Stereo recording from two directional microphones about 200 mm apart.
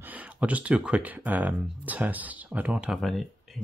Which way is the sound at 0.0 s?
10° right (ahead or behind).